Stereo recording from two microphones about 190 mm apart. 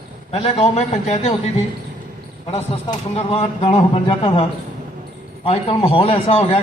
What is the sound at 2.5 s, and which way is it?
A man's voice, 30° left (ahead or behind).